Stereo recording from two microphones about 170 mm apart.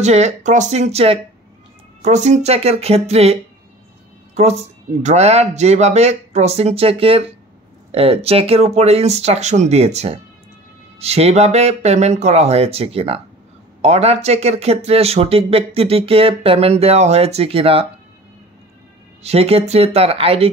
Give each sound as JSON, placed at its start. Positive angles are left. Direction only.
{"t": 0.0, "sound": "speech", "side_deg": -40}
{"t": 4.4, "sound": "speech", "side_deg": -40}
{"t": 19.2, "sound": "speech", "side_deg": -35}